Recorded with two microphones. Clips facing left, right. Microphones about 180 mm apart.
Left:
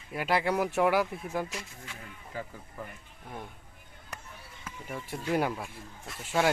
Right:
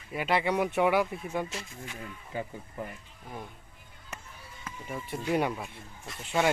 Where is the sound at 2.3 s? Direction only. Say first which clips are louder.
Right 3 dB; 20° right (ahead or behind).